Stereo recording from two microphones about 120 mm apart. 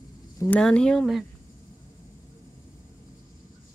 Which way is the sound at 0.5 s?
5° left (ahead or behind).